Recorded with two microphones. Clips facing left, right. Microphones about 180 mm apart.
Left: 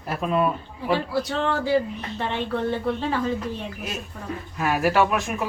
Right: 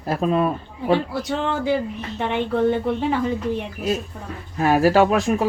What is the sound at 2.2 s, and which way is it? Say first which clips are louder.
Speech: right 6 dB; 15° right (ahead or behind).